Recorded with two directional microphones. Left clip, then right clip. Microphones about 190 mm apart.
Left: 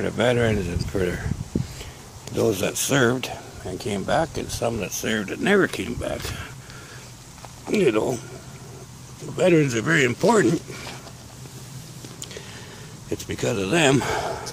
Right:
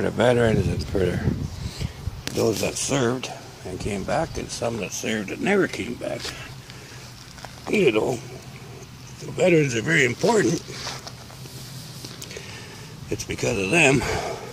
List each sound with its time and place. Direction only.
0.0 s speech: 5° right (ahead or behind)
2.3 s speech: 10° left (ahead or behind)
7.7 s speech: 5° left (ahead or behind)
9.4 s speech: 10° left (ahead or behind)
13.1 s speech: 5° left (ahead or behind)